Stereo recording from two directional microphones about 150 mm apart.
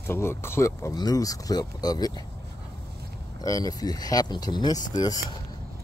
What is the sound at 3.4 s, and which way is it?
Speech, 25° left (ahead or behind).